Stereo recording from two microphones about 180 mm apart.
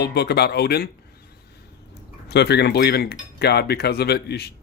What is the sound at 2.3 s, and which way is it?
Speech, 65° left (ahead or behind).